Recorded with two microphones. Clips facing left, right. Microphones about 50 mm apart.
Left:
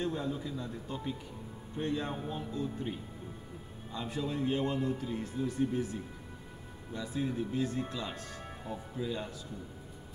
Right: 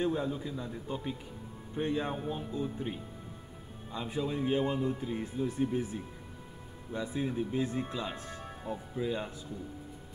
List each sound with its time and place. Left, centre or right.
0.0 s speech: centre
6.9 s speech: right